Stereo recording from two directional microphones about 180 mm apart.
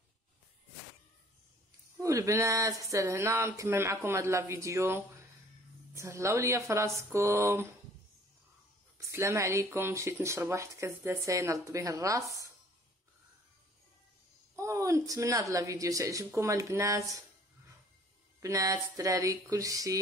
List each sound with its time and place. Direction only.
2.0 s speech: 15° right (ahead or behind)
8.9 s speech: 15° right (ahead or behind)
14.5 s speech: 15° right (ahead or behind)
18.4 s speech: 20° right (ahead or behind)